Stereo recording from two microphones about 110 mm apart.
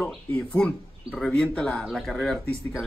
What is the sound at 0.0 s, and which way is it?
A man's voice, 10° left (ahead or behind).